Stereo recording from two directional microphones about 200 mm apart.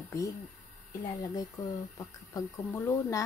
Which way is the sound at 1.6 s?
15° left (ahead or behind).